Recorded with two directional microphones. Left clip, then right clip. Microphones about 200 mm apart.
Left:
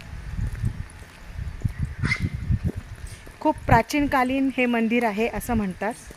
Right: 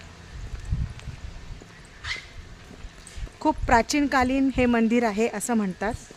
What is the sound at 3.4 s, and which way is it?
Speech, 5° right (ahead or behind).